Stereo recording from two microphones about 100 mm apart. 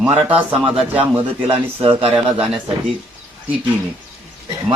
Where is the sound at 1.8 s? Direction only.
65° right (ahead or behind).